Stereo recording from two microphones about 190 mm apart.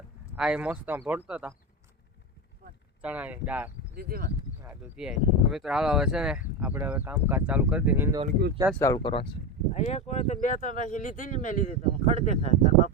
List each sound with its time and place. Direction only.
0.3 s speech: 5° right (ahead or behind)
3.0 s speech: 5° right (ahead or behind)
3.9 s speech: 55° right (ahead or behind)
4.6 s speech: 5° right (ahead or behind)
8.7 s speech: 15° left (ahead or behind)
9.0 s speech: 30° left (ahead or behind)